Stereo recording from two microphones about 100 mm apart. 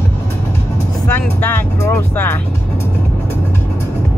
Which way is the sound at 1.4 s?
20° left (ahead or behind).